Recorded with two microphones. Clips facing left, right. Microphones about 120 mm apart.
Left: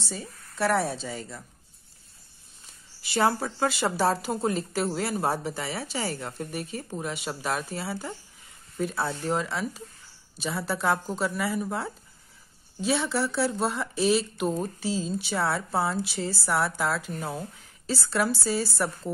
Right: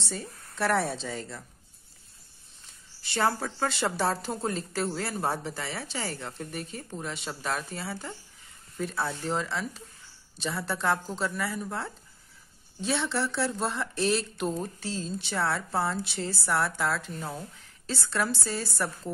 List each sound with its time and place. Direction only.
0.0 s speech: 5° left (ahead or behind)
3.0 s speech: 10° left (ahead or behind)